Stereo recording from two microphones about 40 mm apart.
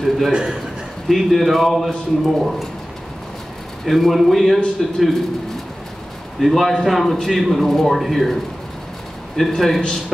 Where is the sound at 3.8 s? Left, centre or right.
Centre.